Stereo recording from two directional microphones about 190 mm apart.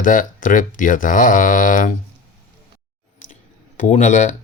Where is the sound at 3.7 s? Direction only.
40° left (ahead or behind).